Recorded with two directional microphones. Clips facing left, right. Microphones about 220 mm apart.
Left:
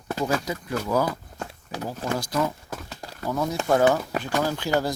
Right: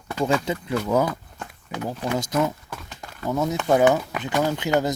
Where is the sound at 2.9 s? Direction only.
40° left (ahead or behind).